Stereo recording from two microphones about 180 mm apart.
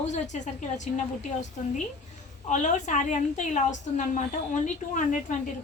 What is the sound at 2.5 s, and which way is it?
A woman's voice, 45° left (ahead or behind).